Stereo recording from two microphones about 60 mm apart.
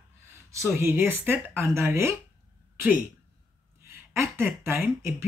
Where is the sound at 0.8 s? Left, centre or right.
Right.